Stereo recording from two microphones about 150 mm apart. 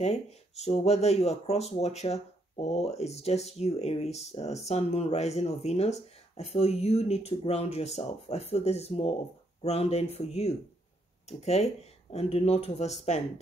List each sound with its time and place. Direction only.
0.0 s speech: 45° left (ahead or behind)